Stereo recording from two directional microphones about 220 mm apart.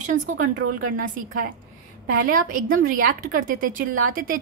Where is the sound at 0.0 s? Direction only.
35° right (ahead or behind).